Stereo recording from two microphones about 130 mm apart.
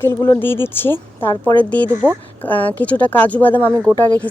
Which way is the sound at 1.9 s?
15° right (ahead or behind).